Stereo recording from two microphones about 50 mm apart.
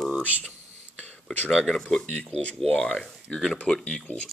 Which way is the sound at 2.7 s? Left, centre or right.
Centre.